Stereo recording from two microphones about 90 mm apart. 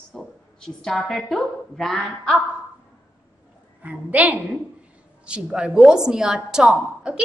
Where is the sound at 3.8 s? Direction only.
15° right (ahead or behind).